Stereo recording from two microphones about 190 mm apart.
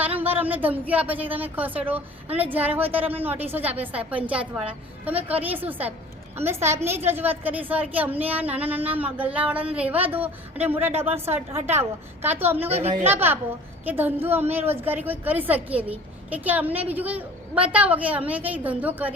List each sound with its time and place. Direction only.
0.0 s a woman's voice: 10° right (ahead or behind)